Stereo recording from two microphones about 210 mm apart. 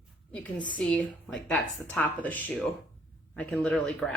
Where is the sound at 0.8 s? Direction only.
5° left (ahead or behind).